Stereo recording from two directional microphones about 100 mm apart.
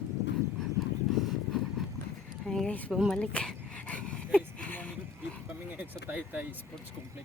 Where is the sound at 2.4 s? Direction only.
5° left (ahead or behind).